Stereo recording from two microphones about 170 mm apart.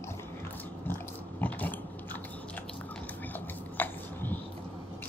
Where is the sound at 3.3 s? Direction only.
10° left (ahead or behind).